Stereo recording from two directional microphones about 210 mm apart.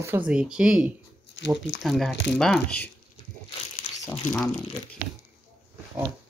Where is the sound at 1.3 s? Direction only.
60° left (ahead or behind).